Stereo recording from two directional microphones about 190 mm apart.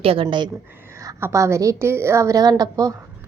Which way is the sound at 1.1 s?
15° right (ahead or behind).